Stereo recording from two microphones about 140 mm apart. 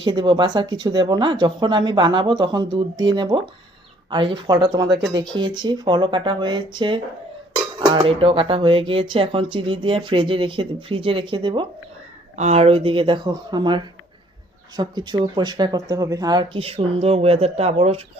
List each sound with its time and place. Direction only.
0.0 s speech: 30° right (ahead or behind)
4.5 s speech: 25° right (ahead or behind)
12.4 s speech: 50° right (ahead or behind)